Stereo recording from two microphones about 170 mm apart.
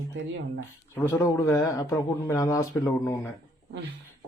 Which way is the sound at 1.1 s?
15° left (ahead or behind).